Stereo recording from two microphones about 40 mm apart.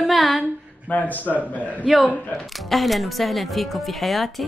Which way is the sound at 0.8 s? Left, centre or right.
Left.